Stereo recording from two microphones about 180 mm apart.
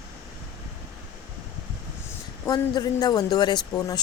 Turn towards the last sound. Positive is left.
turn(degrees=25)  # may be behind; listen again after turning